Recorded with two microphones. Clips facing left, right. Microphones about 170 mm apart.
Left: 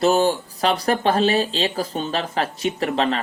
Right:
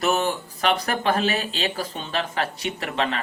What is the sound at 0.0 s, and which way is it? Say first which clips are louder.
Speech: left 5 dB; 30° left (ahead or behind).